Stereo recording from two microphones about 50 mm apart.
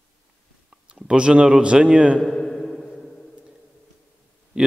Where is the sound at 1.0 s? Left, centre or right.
Centre.